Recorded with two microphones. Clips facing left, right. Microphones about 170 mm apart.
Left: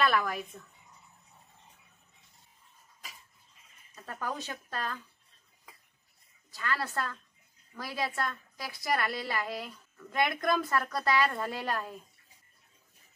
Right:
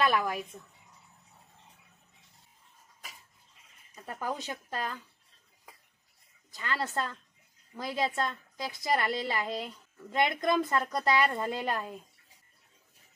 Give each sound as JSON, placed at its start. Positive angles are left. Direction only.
{"t": 0.0, "sound": "speech", "side_deg": -15}
{"t": 3.9, "sound": "speech", "side_deg": -15}
{"t": 6.5, "sound": "a woman's voice", "side_deg": -20}